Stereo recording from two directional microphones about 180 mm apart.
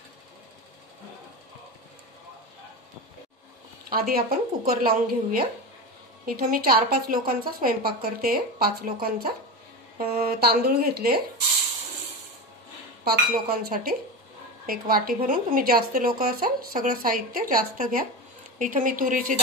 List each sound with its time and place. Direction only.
4.1 s a woman's voice: 55° right (ahead or behind)
13.0 s a woman's voice: 55° right (ahead or behind)